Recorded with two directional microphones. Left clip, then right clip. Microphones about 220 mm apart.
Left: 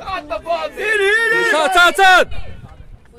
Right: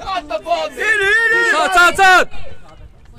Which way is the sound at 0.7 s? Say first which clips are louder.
Right 1 dB; 10° right (ahead or behind).